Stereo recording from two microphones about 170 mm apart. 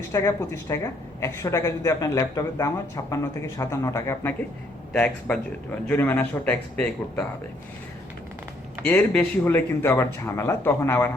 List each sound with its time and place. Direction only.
0.1 s speech: 15° left (ahead or behind)
8.9 s speech: 10° left (ahead or behind)